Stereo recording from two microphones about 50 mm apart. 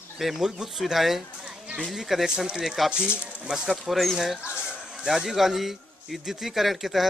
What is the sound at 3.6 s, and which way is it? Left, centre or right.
Speech, centre.